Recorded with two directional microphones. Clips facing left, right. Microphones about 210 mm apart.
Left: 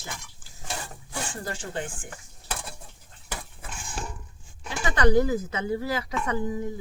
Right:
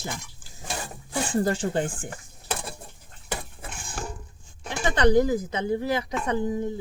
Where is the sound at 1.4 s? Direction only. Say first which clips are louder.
Right 8 dB; 35° right (ahead or behind).